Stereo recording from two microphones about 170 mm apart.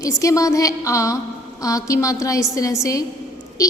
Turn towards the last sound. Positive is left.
turn(degrees=20)  # may be behind; listen again after turning